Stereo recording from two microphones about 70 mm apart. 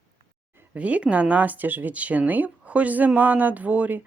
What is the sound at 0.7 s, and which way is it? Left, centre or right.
Speech, centre.